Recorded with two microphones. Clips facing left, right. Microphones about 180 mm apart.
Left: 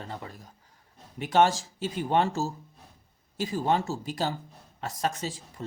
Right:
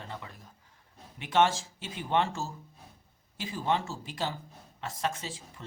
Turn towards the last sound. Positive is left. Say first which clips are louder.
# left 6 dB
turn(degrees=40)  # may be behind; listen again after turning